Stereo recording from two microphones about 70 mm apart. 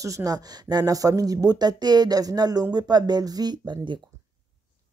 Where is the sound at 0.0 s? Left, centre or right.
Right.